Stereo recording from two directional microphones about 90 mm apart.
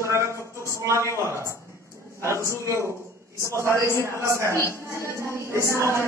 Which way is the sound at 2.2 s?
30° right (ahead or behind).